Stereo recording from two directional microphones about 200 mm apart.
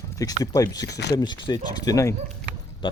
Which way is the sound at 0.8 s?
55° left (ahead or behind).